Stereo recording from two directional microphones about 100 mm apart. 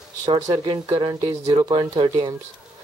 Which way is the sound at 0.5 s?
45° right (ahead or behind).